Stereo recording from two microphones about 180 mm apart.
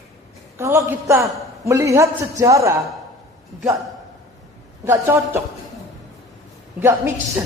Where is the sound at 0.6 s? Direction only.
15° right (ahead or behind).